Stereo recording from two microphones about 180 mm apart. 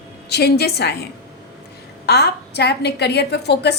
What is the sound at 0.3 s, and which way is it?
A woman's voice, 65° left (ahead or behind).